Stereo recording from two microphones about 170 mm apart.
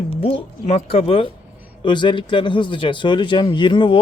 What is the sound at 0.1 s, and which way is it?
Speech, 35° left (ahead or behind).